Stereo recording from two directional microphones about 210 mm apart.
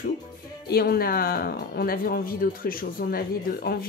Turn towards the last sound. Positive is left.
turn(degrees=45)  # may be behind; listen again after turning